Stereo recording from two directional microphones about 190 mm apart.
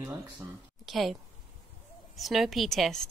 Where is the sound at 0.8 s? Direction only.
Centre (ahead or behind).